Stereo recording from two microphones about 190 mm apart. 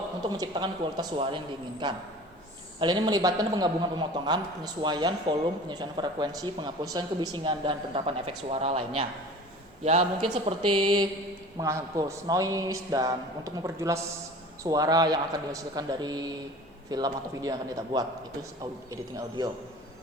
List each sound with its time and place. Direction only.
0.2 s a man's voice: 20° right (ahead or behind)